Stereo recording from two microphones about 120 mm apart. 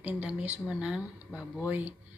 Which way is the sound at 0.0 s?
15° right (ahead or behind).